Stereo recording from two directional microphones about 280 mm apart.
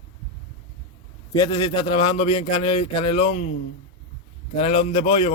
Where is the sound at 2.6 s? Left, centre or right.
Left.